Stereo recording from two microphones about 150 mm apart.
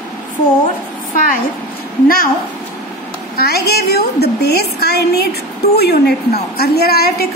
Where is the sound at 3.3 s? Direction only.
90° left.